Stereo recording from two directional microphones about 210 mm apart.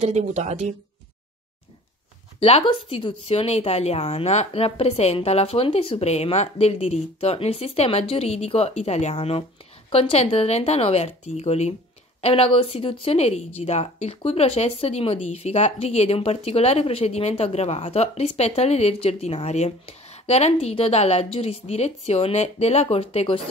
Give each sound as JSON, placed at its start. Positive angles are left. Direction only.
{"t": 0.0, "sound": "a woman's voice", "side_deg": -30}
{"t": 2.4, "sound": "a woman's voice", "side_deg": 25}